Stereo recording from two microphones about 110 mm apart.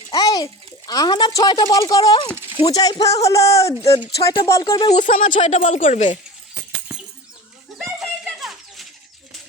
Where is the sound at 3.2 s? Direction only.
30° left (ahead or behind).